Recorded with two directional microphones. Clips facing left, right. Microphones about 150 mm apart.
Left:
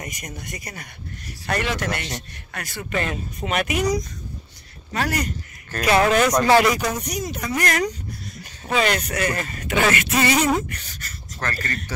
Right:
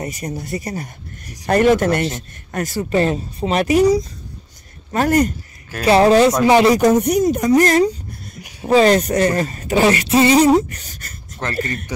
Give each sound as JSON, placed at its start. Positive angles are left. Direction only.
{"t": 0.2, "sound": "speech", "side_deg": -35}
{"t": 4.9, "sound": "speech", "side_deg": -50}
{"t": 5.9, "sound": "speech", "side_deg": -30}
{"t": 6.8, "sound": "speech", "side_deg": -50}
{"t": 8.4, "sound": "a sound", "side_deg": -15}
{"t": 8.6, "sound": "speech", "side_deg": -35}
{"t": 11.3, "sound": "speech", "side_deg": -20}